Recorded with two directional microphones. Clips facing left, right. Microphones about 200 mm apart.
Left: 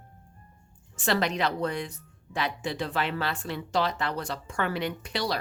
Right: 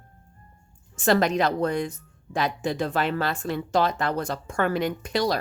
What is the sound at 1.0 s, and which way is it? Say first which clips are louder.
A woman's voice: right 6 dB; 45° right (ahead or behind).